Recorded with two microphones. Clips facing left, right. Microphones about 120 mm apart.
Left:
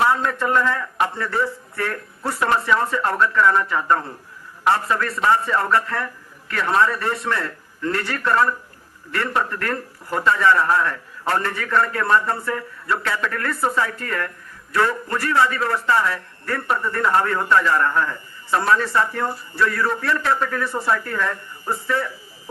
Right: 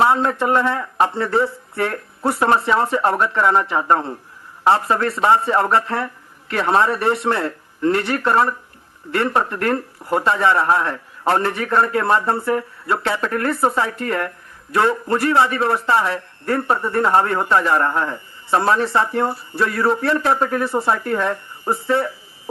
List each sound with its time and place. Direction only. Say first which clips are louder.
0.0 s a man's voice: right 3 dB; 25° right (ahead or behind)